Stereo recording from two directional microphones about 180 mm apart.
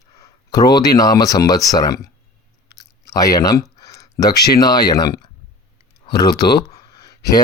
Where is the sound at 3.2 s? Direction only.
20° left (ahead or behind).